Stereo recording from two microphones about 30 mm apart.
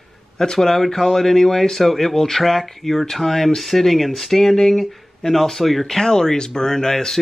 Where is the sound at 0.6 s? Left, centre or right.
Centre.